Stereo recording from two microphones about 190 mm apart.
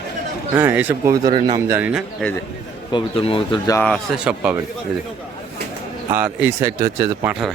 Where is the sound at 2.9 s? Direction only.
25° left (ahead or behind).